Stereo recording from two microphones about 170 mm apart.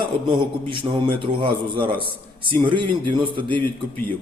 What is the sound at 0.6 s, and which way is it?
A man's voice, 30° right (ahead or behind).